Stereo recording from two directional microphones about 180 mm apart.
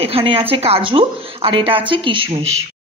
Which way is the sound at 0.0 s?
30° right (ahead or behind).